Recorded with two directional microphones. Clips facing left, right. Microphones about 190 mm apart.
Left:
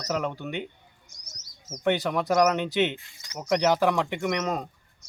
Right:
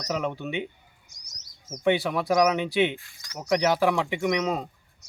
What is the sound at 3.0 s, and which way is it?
Speech, 20° left (ahead or behind).